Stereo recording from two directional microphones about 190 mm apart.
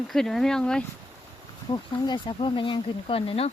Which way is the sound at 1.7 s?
25° left (ahead or behind).